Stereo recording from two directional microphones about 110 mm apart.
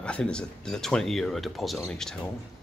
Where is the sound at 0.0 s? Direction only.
10° left (ahead or behind).